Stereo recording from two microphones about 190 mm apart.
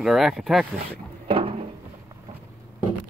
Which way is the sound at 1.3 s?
30° right (ahead or behind).